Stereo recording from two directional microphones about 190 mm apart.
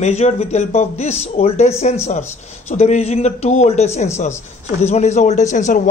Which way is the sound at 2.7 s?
35° left (ahead or behind).